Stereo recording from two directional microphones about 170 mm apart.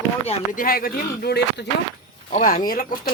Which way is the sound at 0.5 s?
55° left (ahead or behind).